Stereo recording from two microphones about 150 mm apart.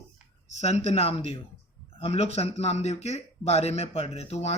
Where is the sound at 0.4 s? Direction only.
45° left (ahead or behind).